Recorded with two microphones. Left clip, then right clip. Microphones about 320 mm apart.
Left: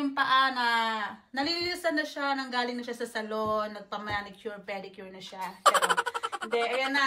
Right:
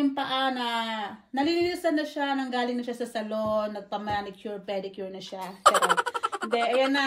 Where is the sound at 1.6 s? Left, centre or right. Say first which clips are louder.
Right 2 dB; centre.